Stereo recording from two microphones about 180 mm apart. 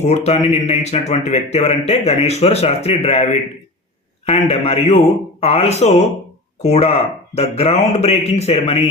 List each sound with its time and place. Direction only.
0.0 s speech: 40° left (ahead or behind)
4.3 s speech: 35° left (ahead or behind)